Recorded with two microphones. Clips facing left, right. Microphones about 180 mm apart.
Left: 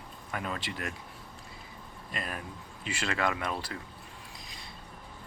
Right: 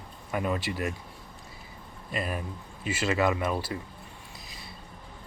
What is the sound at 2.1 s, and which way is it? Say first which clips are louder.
Speech: right 6 dB; 5° right (ahead or behind).